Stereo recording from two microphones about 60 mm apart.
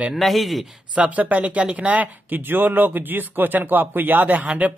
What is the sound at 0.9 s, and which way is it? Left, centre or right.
Speech, right.